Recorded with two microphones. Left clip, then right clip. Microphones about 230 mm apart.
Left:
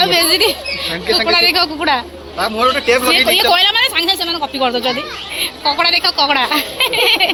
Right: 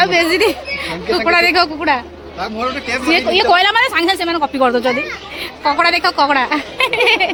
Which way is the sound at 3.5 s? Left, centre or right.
Right.